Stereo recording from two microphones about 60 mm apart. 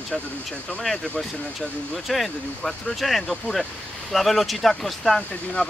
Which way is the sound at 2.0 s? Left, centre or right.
Centre.